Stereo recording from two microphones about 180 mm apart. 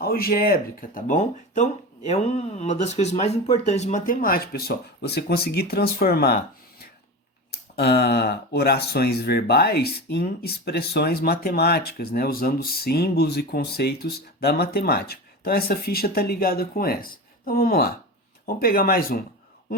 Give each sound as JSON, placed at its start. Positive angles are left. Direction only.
{"t": 0.0, "sound": "speech", "side_deg": 55}
{"t": 7.5, "sound": "speech", "side_deg": 65}